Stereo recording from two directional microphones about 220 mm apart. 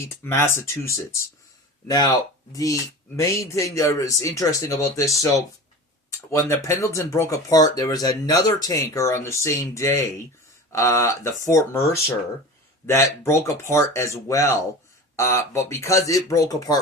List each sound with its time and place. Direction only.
0.1 s speech: 10° left (ahead or behind)
6.5 s speech: 15° left (ahead or behind)